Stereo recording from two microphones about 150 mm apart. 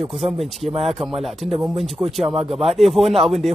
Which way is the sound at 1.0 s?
Centre (ahead or behind).